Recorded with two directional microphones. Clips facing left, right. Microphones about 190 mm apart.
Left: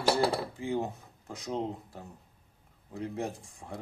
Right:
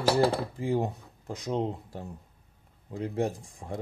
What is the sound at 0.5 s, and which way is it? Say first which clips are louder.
Speech: right 4 dB; 35° right (ahead or behind).